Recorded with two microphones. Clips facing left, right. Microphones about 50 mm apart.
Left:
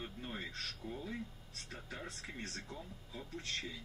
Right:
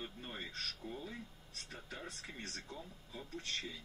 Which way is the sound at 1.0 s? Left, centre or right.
Left.